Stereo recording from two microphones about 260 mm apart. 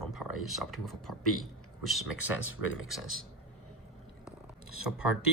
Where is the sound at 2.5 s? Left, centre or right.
Left.